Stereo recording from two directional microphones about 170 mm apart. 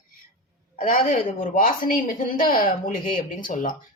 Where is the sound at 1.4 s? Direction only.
55° left (ahead or behind).